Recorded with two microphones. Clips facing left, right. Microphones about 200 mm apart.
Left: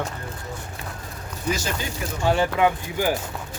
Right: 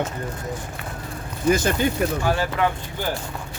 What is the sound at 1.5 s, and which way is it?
Speech, 55° right (ahead or behind).